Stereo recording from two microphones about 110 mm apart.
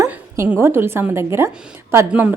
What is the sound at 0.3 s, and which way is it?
A woman's voice, 20° right (ahead or behind).